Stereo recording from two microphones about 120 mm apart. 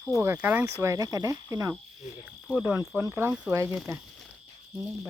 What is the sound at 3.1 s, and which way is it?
Speech, 20° right (ahead or behind).